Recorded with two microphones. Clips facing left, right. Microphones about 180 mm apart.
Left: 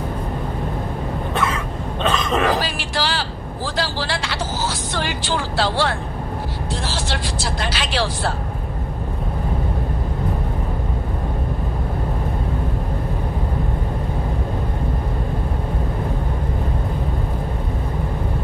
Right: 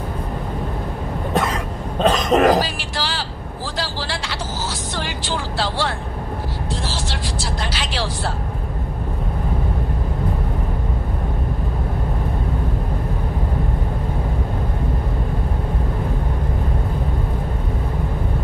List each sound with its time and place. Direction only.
1.3 s cough: 40° right (ahead or behind)
2.6 s speech: 65° left (ahead or behind)
3.7 s a sound: 65° left (ahead or behind)
5.6 s speech: 65° left (ahead or behind)
7.6 s speech: 70° left (ahead or behind)